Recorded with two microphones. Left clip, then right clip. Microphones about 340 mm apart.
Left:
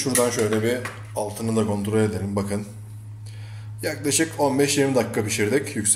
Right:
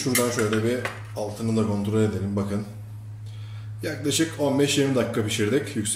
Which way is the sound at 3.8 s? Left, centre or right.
Centre.